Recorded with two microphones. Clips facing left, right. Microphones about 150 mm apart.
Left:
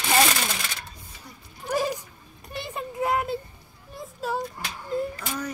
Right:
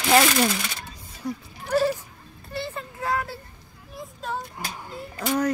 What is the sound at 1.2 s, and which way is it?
Speech, 90° right.